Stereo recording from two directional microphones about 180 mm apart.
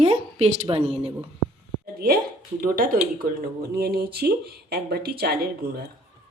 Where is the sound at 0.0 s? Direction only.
35° right (ahead or behind).